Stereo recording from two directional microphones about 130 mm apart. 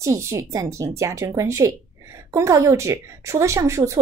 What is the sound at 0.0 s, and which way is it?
Speech, 25° right (ahead or behind).